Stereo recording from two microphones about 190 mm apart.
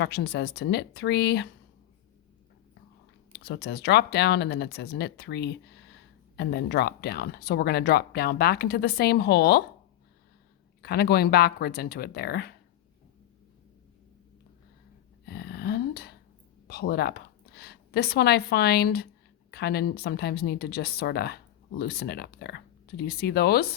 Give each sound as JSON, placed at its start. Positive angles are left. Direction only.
{"t": 0.0, "sound": "speech", "side_deg": 60}
{"t": 3.3, "sound": "speech", "side_deg": 60}
{"t": 10.8, "sound": "speech", "side_deg": 55}
{"t": 15.3, "sound": "a sound", "side_deg": 55}
{"t": 16.6, "sound": "a woman's voice", "side_deg": 55}